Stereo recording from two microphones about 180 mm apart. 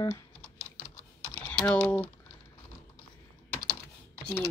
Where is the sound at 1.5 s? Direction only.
10° left (ahead or behind).